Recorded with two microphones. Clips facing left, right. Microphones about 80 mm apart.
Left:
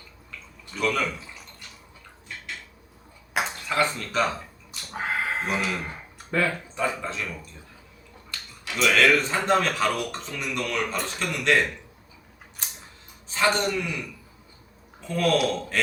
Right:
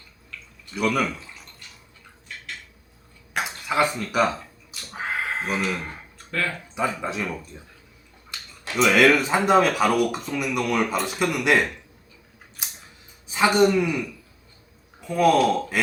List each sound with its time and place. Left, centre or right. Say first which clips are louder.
0.7 s speech: right 2 dB; centre
3.4 s speech: right 3 dB; centre
4.7 s a sound: left 1 dB; centre
6.3 s speech: left 3 dB; centre
7.0 s speech: right 4 dB; centre
8.7 s speech: right 3 dB; centre
12.6 s scissors: even; centre
13.2 s a man's voice: right 5 dB; centre
15.0 s speech: right 5 dB; centre